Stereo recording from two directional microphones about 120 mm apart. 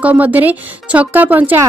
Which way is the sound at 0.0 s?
15° right (ahead or behind).